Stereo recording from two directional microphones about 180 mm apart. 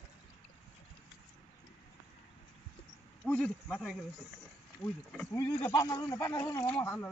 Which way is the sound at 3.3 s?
5° left (ahead or behind).